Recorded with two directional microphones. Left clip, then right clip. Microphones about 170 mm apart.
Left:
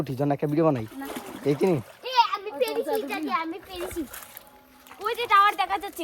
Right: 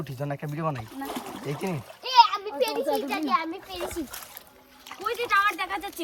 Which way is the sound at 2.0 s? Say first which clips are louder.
Right 4 dB; centre (ahead or behind).